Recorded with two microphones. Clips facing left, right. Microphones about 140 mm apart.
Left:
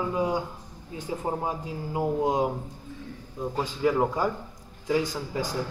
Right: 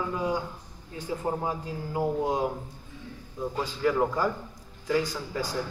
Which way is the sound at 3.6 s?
10° left (ahead or behind).